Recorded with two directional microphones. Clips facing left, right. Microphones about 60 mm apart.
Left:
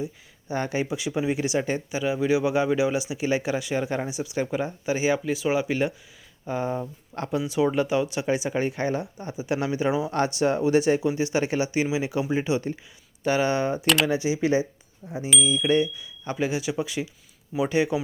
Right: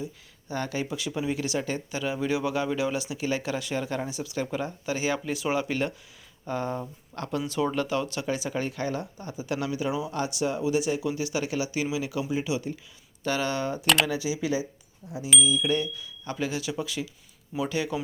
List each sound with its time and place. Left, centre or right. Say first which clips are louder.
0.0 s speech: left 4 dB; left
5.2 s speech: left 3 dB; centre; by 10.1 s left
10.1 s speech: left 5 dB; left
13.2 s speech: left 5 dB; left
13.8 s speech: even; centre
14.1 s speech: left 5 dB; left
15.0 s speech: left 4 dB; centre
15.5 s speech: left 5 dB; left